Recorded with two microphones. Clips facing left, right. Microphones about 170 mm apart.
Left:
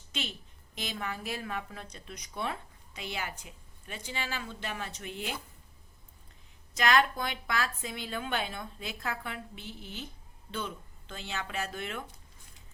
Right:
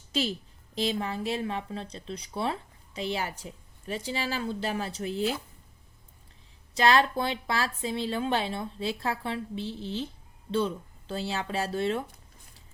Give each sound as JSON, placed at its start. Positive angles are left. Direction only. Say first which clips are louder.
{"t": 0.1, "sound": "a woman's voice", "louder": "right 10 dB", "side_deg": -35}
{"t": 6.7, "sound": "speech", "louder": "right 4 dB", "side_deg": -30}